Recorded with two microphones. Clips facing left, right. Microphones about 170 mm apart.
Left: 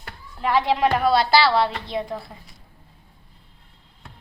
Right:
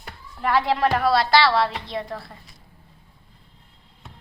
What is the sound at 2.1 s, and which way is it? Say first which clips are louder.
Speech: left 2 dB; 20° left (ahead or behind).